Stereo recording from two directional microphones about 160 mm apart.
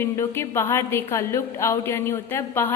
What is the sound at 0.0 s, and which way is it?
A woman's voice, 15° left (ahead or behind).